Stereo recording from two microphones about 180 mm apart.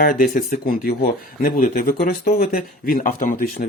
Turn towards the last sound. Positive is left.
turn(degrees=50)  # may be behind; listen again after turning